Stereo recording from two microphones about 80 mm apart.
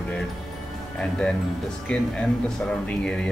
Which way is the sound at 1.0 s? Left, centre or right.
Centre.